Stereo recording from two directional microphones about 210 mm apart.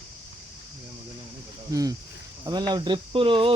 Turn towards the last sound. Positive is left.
turn(degrees=-25)  # may be behind; listen again after turning